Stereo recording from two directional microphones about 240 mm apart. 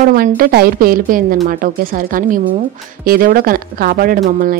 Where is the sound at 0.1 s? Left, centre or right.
Right.